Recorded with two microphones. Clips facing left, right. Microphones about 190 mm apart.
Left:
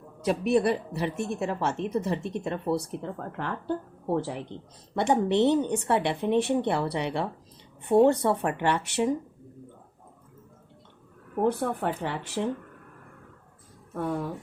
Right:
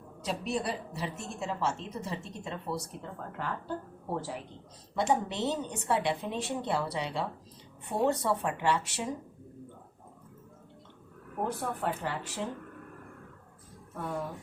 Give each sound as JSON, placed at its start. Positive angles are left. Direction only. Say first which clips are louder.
{"t": 0.2, "sound": "a woman's voice", "louder": "left 10 dB", "side_deg": 60}
{"t": 11.4, "sound": "a woman's voice", "louder": "left 7 dB", "side_deg": 60}